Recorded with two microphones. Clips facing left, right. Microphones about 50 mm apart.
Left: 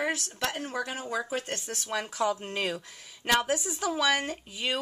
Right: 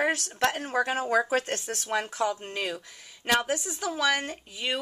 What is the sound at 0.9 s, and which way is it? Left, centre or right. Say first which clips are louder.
Speech: right 7 dB; right.